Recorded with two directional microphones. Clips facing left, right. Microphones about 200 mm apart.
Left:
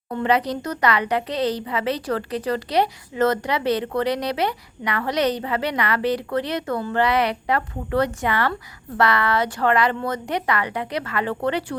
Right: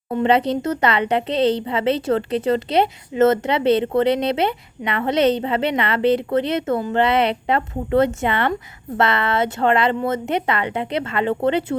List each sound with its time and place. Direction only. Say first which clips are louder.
0.1 s speech: right 4 dB; 25° right (ahead or behind)